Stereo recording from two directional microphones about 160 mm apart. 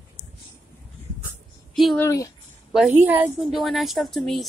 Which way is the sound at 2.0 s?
20° left (ahead or behind).